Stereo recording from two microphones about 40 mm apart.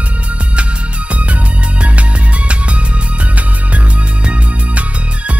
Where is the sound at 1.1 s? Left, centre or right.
Right.